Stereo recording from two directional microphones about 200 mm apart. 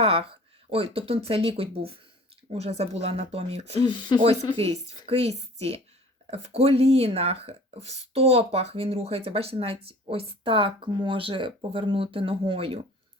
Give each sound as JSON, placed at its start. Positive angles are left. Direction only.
{"t": 0.0, "sound": "a sound", "side_deg": -30}
{"t": 0.9, "sound": "a woman's voice", "side_deg": -30}
{"t": 3.8, "sound": "speech", "side_deg": 20}
{"t": 4.2, "sound": "a woman's voice", "side_deg": -30}